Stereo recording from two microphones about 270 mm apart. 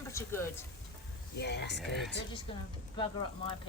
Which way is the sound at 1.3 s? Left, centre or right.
Left.